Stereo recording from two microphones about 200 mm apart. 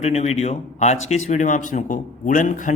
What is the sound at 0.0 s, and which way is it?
Speech, 35° left (ahead or behind).